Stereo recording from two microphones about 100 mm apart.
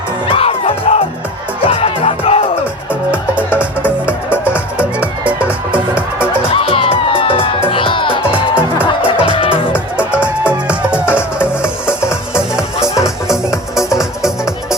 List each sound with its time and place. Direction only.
0.3 s music: 75° left (ahead or behind)
1.6 s music: 65° left (ahead or behind); by 2.4 s 85° left
4.5 s music: 10° right (ahead or behind)
6.5 s music: 65° left (ahead or behind)
8.5 s music: 15° right (ahead or behind)
9.0 s music: 65° left (ahead or behind)
10.0 s music: 10° right (ahead or behind)
11.0 s music: 20° left (ahead or behind)
12.3 s music: 5° right (ahead or behind)
12.8 s music: 30° left (ahead or behind)
14.2 s music: 5° right (ahead or behind)